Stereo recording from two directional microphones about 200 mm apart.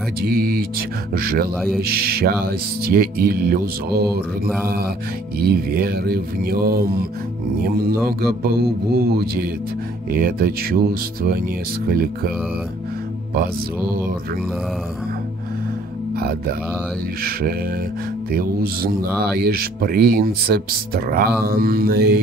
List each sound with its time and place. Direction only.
0.2 s speech: 50° right (ahead or behind)
13.3 s speech: 50° right (ahead or behind)
16.2 s speech: 50° right (ahead or behind)